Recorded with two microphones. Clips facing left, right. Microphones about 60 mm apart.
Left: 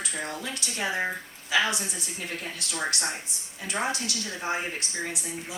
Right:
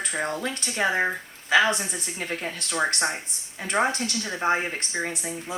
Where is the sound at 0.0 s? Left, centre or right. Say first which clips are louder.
Right 5 dB; right.